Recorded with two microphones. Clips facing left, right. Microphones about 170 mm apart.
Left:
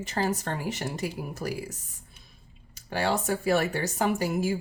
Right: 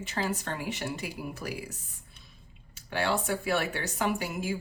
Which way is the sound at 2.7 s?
40° left (ahead or behind).